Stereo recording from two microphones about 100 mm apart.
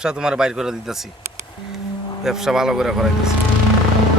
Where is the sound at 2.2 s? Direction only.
5° right (ahead or behind).